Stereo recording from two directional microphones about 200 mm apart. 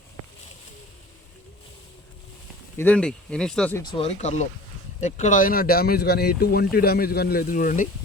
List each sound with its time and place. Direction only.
2.7 s speech: 5° left (ahead or behind)
3.9 s speech: 30° left (ahead or behind)